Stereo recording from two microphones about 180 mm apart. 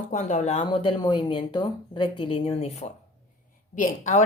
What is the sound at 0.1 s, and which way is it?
Speech, 40° left (ahead or behind).